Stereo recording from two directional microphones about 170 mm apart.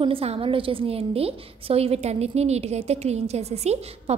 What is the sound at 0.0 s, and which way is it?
A woman's voice, 35° right (ahead or behind).